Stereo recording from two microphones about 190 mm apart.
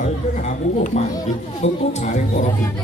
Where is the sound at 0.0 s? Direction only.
40° left (ahead or behind).